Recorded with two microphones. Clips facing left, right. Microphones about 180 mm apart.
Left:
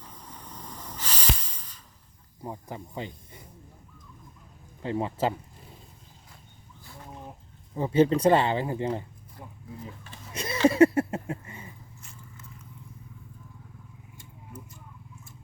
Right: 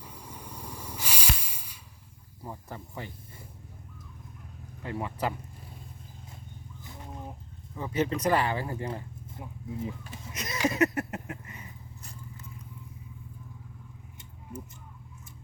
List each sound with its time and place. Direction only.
0.0 s hiss: 10° right (ahead or behind)
2.4 s speech: 15° left (ahead or behind)
4.8 s speech: 25° left (ahead or behind)
7.8 s speech: 30° left (ahead or behind)
9.4 s speech: 10° right (ahead or behind)
10.3 s a sound: 30° left (ahead or behind)